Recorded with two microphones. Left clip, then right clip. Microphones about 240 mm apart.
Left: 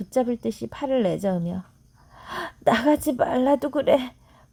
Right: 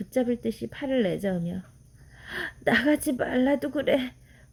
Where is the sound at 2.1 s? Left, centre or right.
Centre.